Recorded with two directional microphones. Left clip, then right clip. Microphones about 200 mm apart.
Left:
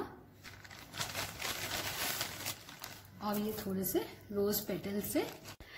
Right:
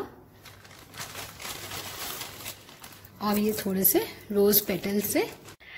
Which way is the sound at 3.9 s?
40° right (ahead or behind).